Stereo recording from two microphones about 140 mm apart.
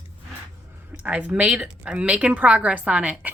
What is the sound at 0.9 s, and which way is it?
A woman's voice, 10° right (ahead or behind).